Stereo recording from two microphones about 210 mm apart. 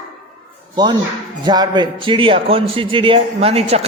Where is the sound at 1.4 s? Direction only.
20° right (ahead or behind).